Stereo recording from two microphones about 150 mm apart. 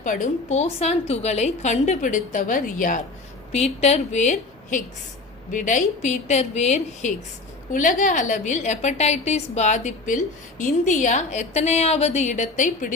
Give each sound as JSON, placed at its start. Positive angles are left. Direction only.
{"t": 0.0, "sound": "a woman's voice", "side_deg": 55}
{"t": 3.5, "sound": "a woman's voice", "side_deg": 45}